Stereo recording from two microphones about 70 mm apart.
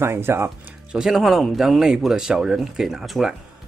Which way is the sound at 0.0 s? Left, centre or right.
Right.